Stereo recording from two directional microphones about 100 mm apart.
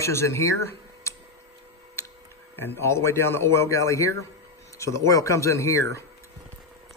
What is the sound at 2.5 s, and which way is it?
Speech, 20° left (ahead or behind).